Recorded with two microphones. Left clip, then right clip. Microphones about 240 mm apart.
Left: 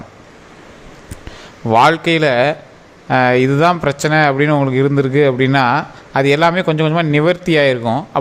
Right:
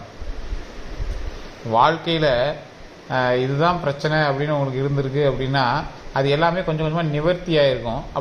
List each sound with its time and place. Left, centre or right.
1.7 s speech: left